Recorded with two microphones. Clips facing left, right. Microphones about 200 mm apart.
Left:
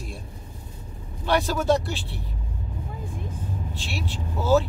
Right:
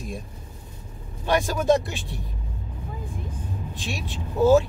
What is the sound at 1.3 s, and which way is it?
Speech, 15° right (ahead or behind).